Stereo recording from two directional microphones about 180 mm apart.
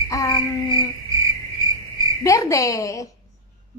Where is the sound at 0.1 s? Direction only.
20° left (ahead or behind).